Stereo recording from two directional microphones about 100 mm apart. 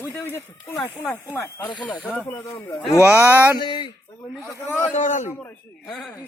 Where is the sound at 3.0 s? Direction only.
15° right (ahead or behind).